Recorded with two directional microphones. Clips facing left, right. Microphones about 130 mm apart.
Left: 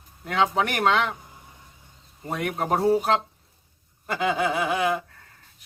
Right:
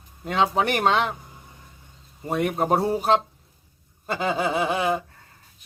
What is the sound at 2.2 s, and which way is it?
Speech, 25° right (ahead or behind).